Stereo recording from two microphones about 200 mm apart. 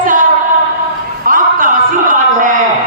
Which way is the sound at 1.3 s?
45° right (ahead or behind).